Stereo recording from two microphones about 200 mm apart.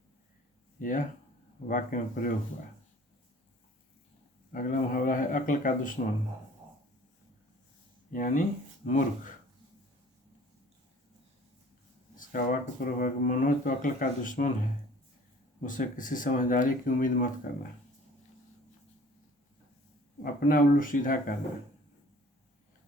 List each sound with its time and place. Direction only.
0.8 s speech: 40° left (ahead or behind)
4.5 s speech: 45° left (ahead or behind)
8.1 s speech: 40° left (ahead or behind)
12.1 s speech: 45° left (ahead or behind)
15.6 s speech: 40° left (ahead or behind)
20.2 s speech: 45° left (ahead or behind)